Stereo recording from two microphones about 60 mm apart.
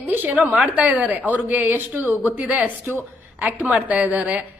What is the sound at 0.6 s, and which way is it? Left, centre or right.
A woman's voice, right.